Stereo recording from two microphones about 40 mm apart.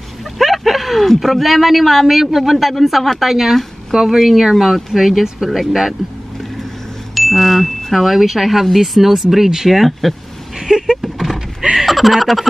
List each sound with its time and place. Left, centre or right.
0.4 s a sound: centre
1.1 s a man's voice: centre
7.2 s a man's voice: centre
10.6 s vehicle: centre
11.0 s power windows: centre
11.8 s speech: centre